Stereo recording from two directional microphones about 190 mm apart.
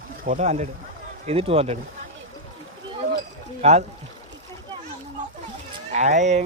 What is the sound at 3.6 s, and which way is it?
Speech, 35° right (ahead or behind).